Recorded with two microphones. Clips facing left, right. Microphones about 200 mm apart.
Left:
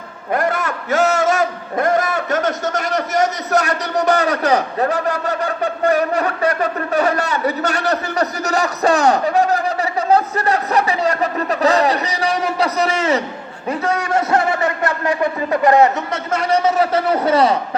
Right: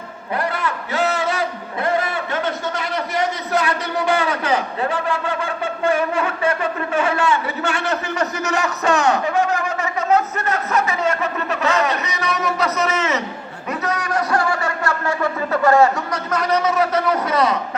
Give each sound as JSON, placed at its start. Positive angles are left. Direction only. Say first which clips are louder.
{"t": 0.3, "sound": "a man's voice", "louder": "left 3 dB", "side_deg": 45}